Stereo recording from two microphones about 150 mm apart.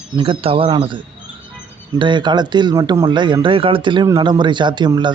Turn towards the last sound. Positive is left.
turn(degrees=-30)  # may be behind; listen again after turning